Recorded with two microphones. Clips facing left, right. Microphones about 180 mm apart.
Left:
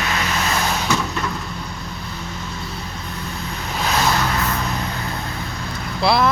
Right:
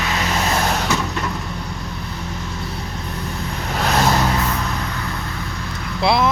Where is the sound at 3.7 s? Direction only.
55° right (ahead or behind).